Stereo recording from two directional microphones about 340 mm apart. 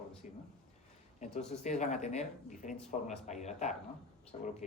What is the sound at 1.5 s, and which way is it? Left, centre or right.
Speech, centre.